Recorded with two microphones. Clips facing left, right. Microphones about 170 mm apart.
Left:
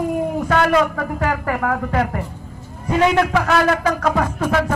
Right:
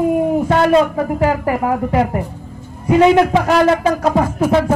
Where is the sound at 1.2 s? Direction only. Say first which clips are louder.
Right 4 dB; 15° right (ahead or behind).